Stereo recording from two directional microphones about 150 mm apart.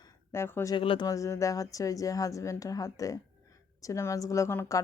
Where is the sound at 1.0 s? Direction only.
20° left (ahead or behind).